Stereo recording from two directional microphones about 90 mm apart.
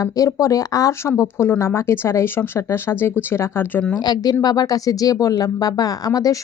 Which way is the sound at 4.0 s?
50° left (ahead or behind).